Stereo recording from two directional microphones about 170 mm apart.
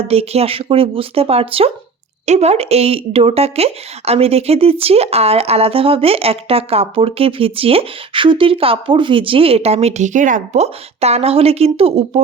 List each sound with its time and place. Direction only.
0.0 s speech: 35° right (ahead or behind)